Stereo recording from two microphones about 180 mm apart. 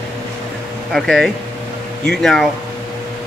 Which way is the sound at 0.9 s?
Centre (ahead or behind).